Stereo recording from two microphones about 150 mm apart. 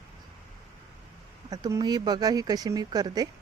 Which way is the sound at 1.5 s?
25° right (ahead or behind).